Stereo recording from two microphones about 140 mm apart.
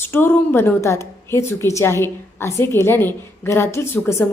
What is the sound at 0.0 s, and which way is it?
A woman's voice, 15° left (ahead or behind).